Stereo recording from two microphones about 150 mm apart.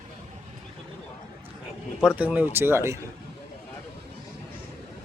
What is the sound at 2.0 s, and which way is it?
Speech, 10° right (ahead or behind).